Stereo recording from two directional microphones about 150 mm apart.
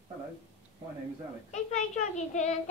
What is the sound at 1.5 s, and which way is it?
A child's voice, 50° left (ahead or behind).